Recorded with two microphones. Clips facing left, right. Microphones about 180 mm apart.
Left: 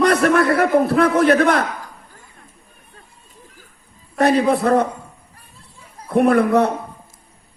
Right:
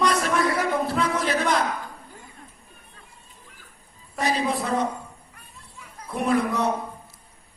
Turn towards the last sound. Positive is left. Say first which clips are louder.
# left 8 dB
turn(degrees=60)  # may be behind; listen again after turning